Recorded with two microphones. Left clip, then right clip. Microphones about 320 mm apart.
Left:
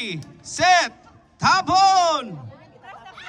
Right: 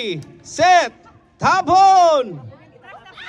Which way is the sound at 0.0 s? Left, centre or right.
Centre.